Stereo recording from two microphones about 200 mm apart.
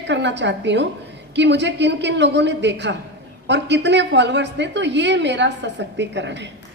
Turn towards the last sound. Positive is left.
turn(degrees=-60)  # may be behind; listen again after turning